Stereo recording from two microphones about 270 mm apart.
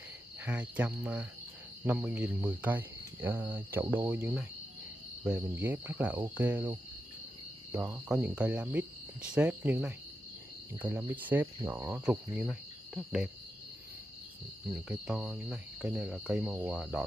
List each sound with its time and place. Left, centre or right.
0.4 s speech: centre
14.7 s speech: centre